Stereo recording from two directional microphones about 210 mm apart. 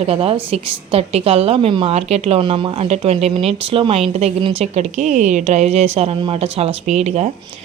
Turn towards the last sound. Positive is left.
turn(degrees=-30)  # may be behind; listen again after turning